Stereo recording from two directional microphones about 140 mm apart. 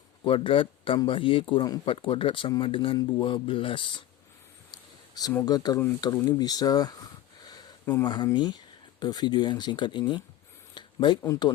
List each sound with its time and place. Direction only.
0.3 s speech: 40° left (ahead or behind)
5.5 s speech: 30° left (ahead or behind)
10.8 s a sound: 35° left (ahead or behind)